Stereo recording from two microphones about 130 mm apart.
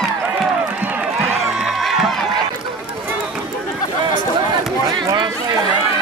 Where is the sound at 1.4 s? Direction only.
5° right (ahead or behind).